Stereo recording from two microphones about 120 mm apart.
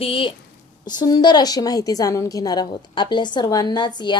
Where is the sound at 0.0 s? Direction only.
50° left (ahead or behind).